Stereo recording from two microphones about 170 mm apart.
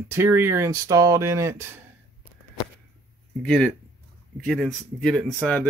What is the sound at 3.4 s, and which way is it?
Speech, 5° left (ahead or behind).